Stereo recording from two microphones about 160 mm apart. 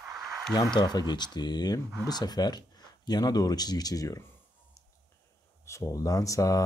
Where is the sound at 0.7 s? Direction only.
25° left (ahead or behind).